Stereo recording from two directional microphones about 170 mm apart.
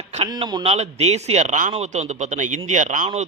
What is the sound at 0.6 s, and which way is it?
A man's voice, 40° right (ahead or behind).